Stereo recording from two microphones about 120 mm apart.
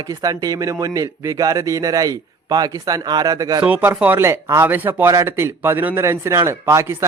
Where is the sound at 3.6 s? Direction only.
15° right (ahead or behind).